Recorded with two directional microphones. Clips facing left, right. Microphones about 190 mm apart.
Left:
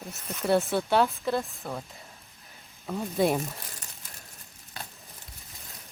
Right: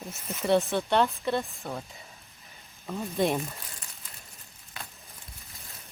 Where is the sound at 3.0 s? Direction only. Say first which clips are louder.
Left 2 dB; 5° left (ahead or behind).